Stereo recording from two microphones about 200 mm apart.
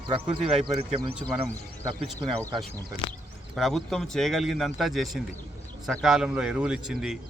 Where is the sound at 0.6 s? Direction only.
25° right (ahead or behind).